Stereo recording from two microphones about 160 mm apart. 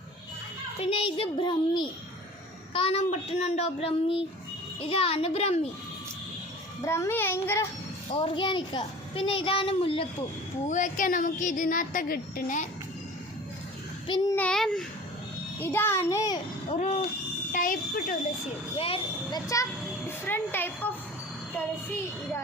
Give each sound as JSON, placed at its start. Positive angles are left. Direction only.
{"t": 0.8, "sound": "a child's voice", "side_deg": 35}
{"t": 6.8, "sound": "a child's voice", "side_deg": 15}
{"t": 8.1, "sound": "a child's voice", "side_deg": 30}
{"t": 10.7, "sound": "a woman's voice", "side_deg": 50}
{"t": 14.3, "sound": "a child's voice", "side_deg": 5}
{"t": 15.6, "sound": "a child's voice", "side_deg": 15}
{"t": 16.6, "sound": "speech", "side_deg": 45}
{"t": 17.5, "sound": "speech", "side_deg": 60}
{"t": 18.8, "sound": "a child's voice", "side_deg": 35}
{"t": 20.1, "sound": "a woman's voice", "side_deg": 15}